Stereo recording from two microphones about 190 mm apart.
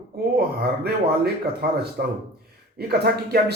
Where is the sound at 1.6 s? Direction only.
55° right (ahead or behind).